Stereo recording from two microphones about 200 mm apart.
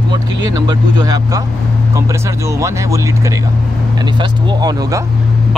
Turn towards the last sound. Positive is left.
turn(degrees=-20)  # may be behind; listen again after turning